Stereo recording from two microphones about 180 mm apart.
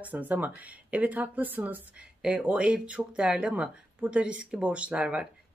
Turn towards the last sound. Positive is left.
turn(degrees=-5)  # may be behind; listen again after turning